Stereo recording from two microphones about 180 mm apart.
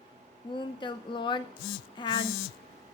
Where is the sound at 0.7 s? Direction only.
25° left (ahead or behind).